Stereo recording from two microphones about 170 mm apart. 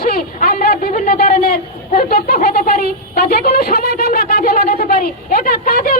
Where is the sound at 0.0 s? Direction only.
60° left (ahead or behind).